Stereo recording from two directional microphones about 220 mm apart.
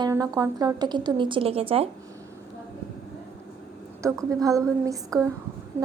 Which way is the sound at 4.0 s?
15° right (ahead or behind).